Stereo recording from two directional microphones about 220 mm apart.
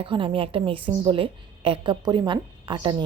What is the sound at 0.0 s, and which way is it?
Speech, 25° right (ahead or behind).